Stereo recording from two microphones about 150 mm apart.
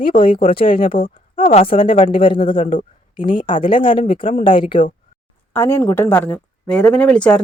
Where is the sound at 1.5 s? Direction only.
40° left (ahead or behind).